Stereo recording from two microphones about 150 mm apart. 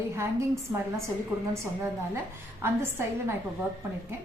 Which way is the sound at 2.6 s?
15° right (ahead or behind).